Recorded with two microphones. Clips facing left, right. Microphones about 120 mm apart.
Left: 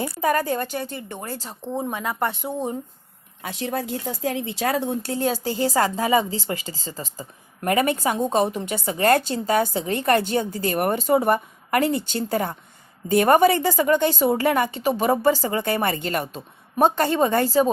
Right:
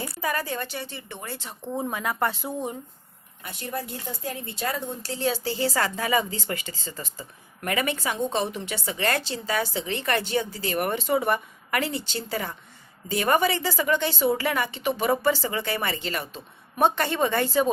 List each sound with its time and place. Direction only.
0.2 s speech: 45° left (ahead or behind)
1.7 s speech: 20° left (ahead or behind)
3.4 s speech: 90° left; by 17.7 s 35° left (ahead or behind)